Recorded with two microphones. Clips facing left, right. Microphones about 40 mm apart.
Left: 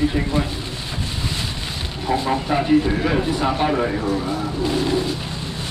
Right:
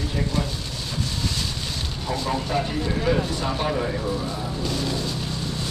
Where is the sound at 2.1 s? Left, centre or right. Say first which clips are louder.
Left 6 dB; left.